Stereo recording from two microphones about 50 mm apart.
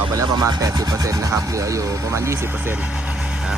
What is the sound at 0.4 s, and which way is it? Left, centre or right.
Speech, right.